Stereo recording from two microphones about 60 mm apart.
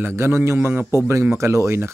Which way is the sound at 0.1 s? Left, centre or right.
Right.